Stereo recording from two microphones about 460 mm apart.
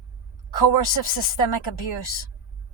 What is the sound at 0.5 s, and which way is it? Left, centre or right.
Speech, left.